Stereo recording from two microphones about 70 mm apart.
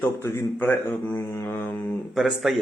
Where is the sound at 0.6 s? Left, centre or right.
Left.